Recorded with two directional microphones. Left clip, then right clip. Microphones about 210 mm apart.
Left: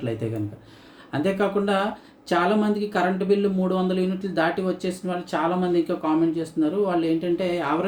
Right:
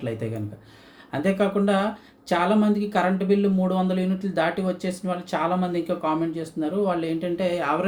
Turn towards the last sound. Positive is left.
turn(degrees=5)  # may be behind; listen again after turning